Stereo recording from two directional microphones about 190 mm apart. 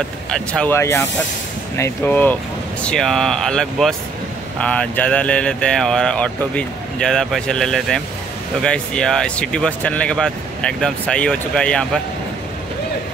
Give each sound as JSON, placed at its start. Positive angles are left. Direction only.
{"t": 0.3, "sound": "speech", "side_deg": 5}